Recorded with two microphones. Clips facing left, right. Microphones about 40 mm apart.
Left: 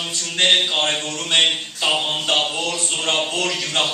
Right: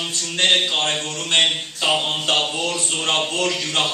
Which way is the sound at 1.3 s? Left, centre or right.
Centre.